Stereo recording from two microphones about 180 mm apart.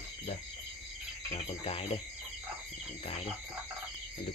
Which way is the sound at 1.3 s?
35° left (ahead or behind).